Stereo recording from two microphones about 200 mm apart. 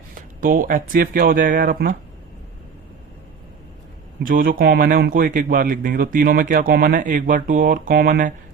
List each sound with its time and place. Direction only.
0.1 s speech: 45° right (ahead or behind)
4.3 s speech: 45° right (ahead or behind)